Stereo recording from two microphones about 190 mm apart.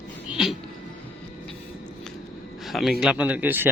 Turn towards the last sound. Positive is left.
turn(degrees=-10)  # may be behind; listen again after turning